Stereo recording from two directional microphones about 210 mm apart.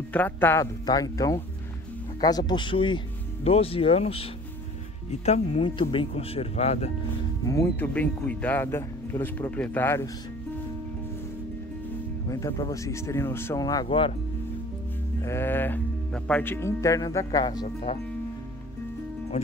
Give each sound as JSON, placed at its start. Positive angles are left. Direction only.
{"t": 0.1, "sound": "speech", "side_deg": 10}
{"t": 7.4, "sound": "speech", "side_deg": 15}
{"t": 12.3, "sound": "speech", "side_deg": 15}
{"t": 15.2, "sound": "speech", "side_deg": 10}
{"t": 19.3, "sound": "speech", "side_deg": 30}